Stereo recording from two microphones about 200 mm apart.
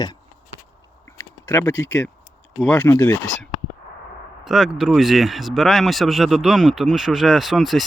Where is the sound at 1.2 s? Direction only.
10° left (ahead or behind).